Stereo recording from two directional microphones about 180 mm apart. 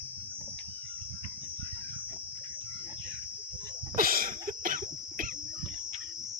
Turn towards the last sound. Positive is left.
turn(degrees=-50)  # may be behind; listen again after turning